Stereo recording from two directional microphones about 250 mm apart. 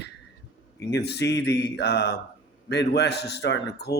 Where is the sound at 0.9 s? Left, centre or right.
Left.